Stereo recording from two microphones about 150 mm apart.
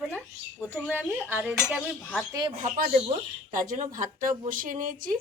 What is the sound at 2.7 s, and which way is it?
Speech, 70° right (ahead or behind).